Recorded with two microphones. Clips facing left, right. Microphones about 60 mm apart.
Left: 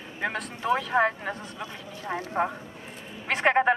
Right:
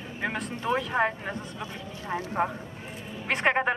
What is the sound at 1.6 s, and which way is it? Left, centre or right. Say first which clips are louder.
Speech: even; left.